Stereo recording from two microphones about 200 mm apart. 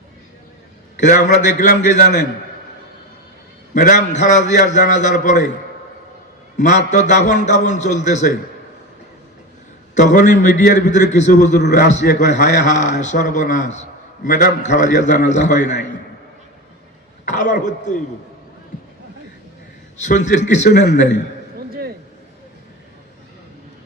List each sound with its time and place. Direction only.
1.4 s a man's voice: 40° left (ahead or behind)
3.8 s a man's voice: 40° left (ahead or behind)
6.6 s a man's voice: 35° left (ahead or behind)
9.9 s a man's voice: 35° left (ahead or behind)
11.6 s a man's voice: 50° left (ahead or behind)
11.9 s a man's voice: 35° left (ahead or behind)
17.2 s a man's voice: 40° left (ahead or behind)
20.0 s a man's voice: 35° left (ahead or behind)
21.7 s a sound: 50° right (ahead or behind)